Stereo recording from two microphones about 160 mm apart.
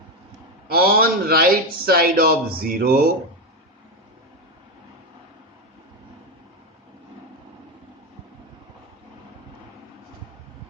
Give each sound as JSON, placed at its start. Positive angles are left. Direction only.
{"t": 0.7, "sound": "a man's voice", "side_deg": -70}